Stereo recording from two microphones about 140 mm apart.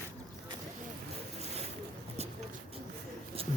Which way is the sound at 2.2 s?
50° right (ahead or behind).